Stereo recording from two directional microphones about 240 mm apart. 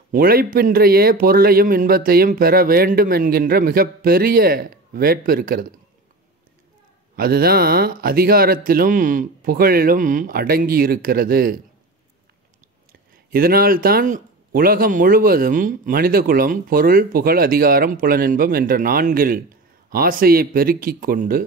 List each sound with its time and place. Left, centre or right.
0.1 s speech: right
7.2 s speech: right
13.3 s speech: right